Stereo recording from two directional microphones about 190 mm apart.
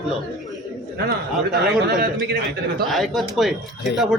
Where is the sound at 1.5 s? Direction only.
55° right (ahead or behind).